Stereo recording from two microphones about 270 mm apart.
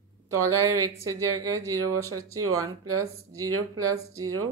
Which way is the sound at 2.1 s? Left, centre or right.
Right.